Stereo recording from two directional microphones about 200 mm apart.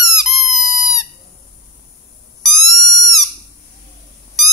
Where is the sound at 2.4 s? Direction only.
Centre (ahead or behind).